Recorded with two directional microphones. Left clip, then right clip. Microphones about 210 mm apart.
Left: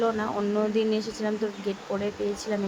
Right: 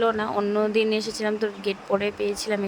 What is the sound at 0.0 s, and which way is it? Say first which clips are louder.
Speech: right 3 dB; 30° right (ahead or behind).